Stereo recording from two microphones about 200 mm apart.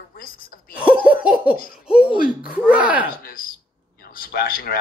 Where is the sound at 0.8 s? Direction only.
5° right (ahead or behind).